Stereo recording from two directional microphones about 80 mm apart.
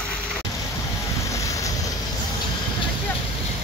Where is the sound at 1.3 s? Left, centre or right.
Left.